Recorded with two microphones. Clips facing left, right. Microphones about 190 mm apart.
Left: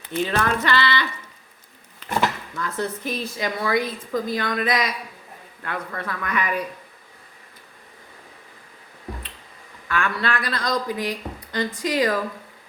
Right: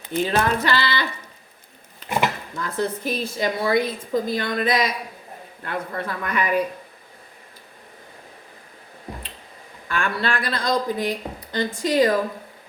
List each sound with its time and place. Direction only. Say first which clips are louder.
0.1 s speech: right 2 dB; 35° right (ahead or behind)
2.0 s dishes: even; 15° right (ahead or behind)
2.6 s a woman's voice: right 3 dB; 30° right (ahead or behind)
9.9 s a woman's voice: even; 30° right (ahead or behind)